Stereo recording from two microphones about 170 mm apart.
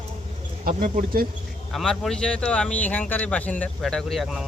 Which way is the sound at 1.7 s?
Centre (ahead or behind).